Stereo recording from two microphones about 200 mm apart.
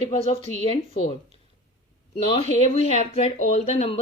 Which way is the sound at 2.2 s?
30° left (ahead or behind).